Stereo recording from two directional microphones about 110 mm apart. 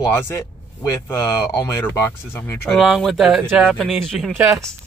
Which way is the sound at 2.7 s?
Centre (ahead or behind).